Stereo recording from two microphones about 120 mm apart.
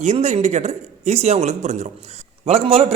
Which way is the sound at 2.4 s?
55° right (ahead or behind).